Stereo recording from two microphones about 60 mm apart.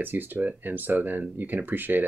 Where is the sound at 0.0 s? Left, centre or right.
Right.